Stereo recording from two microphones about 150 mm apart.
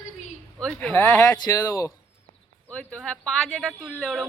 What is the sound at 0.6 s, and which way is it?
Speech, 5° left (ahead or behind).